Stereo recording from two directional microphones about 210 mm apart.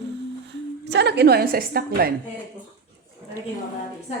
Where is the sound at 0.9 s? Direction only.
55° right (ahead or behind).